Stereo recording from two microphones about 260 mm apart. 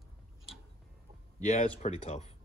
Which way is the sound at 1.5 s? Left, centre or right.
Left.